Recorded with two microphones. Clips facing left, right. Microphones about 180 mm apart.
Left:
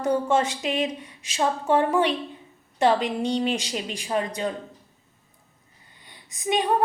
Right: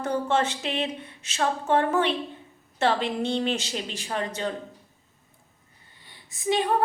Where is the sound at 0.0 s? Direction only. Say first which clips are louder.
Left 3 dB; 10° left (ahead or behind).